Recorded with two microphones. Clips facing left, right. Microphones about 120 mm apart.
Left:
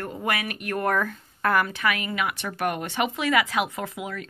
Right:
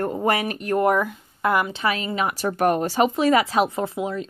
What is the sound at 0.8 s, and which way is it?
Speech, 15° right (ahead or behind).